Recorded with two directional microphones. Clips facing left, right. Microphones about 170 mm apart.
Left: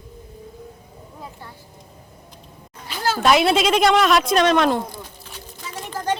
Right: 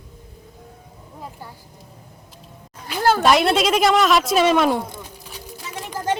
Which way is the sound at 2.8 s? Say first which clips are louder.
Right 6 dB; 55° right (ahead or behind).